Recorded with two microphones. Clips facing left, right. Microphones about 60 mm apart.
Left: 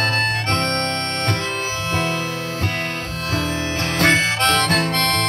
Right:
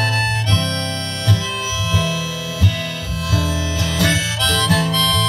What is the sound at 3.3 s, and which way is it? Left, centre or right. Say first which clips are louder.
Harmonica: right 1 dB; left.